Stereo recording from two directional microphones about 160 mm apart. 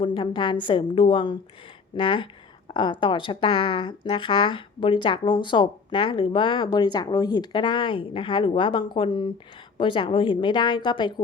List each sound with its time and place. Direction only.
0.0 s speech: 30° left (ahead or behind)